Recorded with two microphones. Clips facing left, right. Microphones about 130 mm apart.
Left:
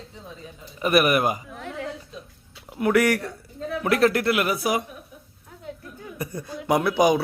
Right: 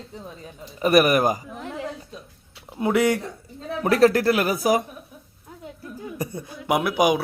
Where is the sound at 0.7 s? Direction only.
35° right (ahead or behind).